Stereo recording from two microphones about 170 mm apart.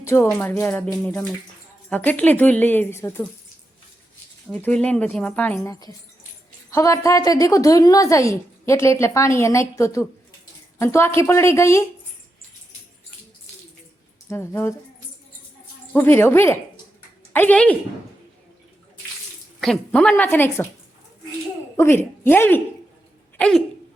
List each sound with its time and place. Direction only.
0.0 s a woman's voice: 15° left (ahead or behind)
1.9 s a woman's voice: 10° left (ahead or behind)
4.5 s a woman's voice: 10° left (ahead or behind)
14.3 s a woman's voice: 15° left (ahead or behind)
15.9 s a woman's voice: 10° left (ahead or behind)
19.5 s speech: 5° left (ahead or behind)
22.2 s a woman's voice: 10° left (ahead or behind)